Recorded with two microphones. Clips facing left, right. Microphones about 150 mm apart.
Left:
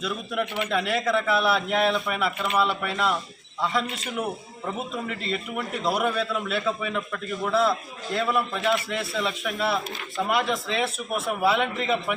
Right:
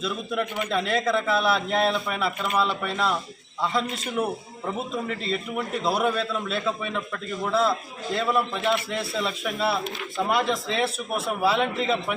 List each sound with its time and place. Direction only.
0.0 s a man's voice: centre (ahead or behind)
11.6 s a man's voice: 35° right (ahead or behind)